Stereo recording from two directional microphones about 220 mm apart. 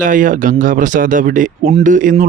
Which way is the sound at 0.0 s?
35° right (ahead or behind).